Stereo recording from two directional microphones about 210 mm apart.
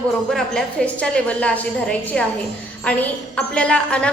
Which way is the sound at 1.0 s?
5° left (ahead or behind).